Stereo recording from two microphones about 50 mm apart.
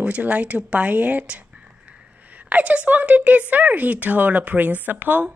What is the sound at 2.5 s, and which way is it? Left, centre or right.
Speech, right.